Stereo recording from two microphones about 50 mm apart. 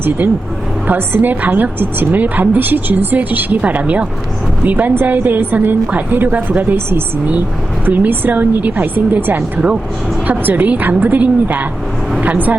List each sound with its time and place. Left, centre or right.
0.2 s a woman's voice: right
7.9 s a woman's voice: right